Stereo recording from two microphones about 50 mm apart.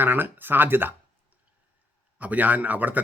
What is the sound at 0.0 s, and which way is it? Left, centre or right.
Speech, right.